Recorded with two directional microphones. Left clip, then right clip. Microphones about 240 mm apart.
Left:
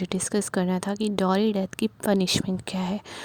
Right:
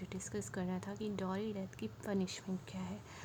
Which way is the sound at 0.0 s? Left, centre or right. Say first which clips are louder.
Left 17 dB; left.